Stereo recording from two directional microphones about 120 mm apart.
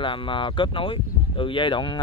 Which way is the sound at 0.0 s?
45° left (ahead or behind).